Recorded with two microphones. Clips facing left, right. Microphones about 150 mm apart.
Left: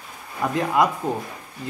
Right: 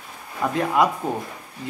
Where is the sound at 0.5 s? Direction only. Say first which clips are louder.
Even; centre (ahead or behind).